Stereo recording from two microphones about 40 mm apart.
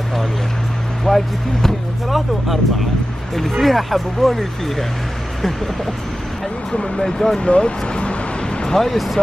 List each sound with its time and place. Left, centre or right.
1.0 s speech: centre
6.7 s speech: centre
7.3 s speech: left
8.6 s speech: centre